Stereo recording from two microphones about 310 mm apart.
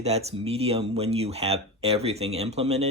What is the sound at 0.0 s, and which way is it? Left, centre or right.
Speech, centre.